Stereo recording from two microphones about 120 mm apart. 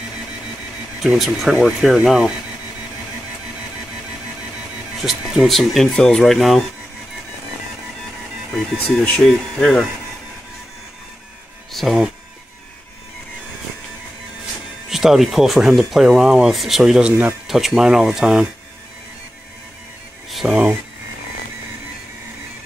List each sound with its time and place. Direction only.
1.0 s speech: centre (ahead or behind)
5.0 s speech: centre (ahead or behind)
8.5 s speech: centre (ahead or behind)
11.7 s speech: centre (ahead or behind)
14.9 s speech: 5° right (ahead or behind)
17.1 s speech: 20° right (ahead or behind)
17.5 s speech: centre (ahead or behind)
20.2 s a sound: centre (ahead or behind)